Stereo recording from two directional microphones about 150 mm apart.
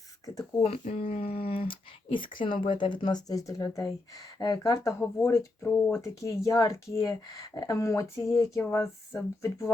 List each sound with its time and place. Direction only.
0.6 s speech: 40° left (ahead or behind); by 9.7 s 20° left (ahead or behind)